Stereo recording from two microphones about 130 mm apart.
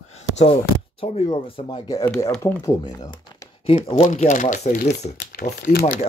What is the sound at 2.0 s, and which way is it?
Speech, 20° left (ahead or behind).